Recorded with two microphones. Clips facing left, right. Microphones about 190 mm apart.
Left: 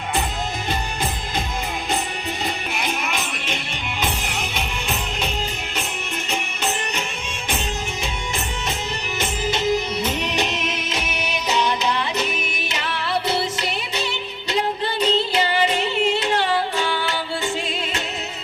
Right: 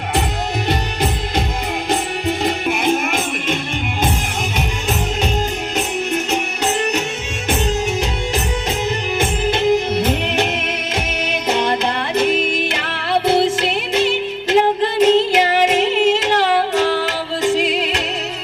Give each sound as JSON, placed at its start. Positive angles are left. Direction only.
{"t": 2.4, "sound": "music", "side_deg": -50}
{"t": 9.1, "sound": "music", "side_deg": -55}
{"t": 14.5, "sound": "yodeling", "side_deg": -70}
{"t": 16.8, "sound": "music", "side_deg": -40}
{"t": 17.6, "sound": "music", "side_deg": -75}